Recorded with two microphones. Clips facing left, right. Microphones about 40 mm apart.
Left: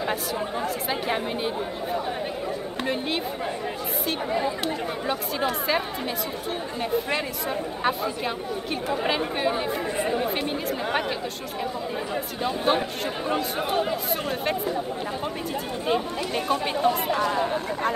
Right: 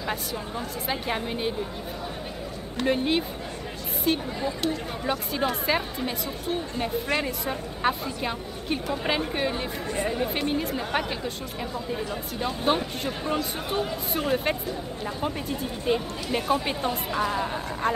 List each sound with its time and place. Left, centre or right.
0.8 s speech: centre
2.9 s speech: centre
4.3 s speech: left
5.0 s speech: centre
12.4 s speech: centre
15.9 s speech: centre